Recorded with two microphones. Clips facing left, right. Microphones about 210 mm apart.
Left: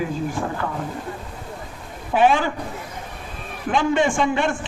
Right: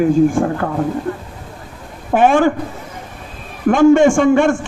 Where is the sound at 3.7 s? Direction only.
45° right (ahead or behind).